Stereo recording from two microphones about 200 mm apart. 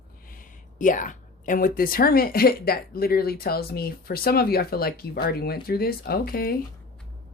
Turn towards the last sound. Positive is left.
turn(degrees=50)  # may be behind; listen again after turning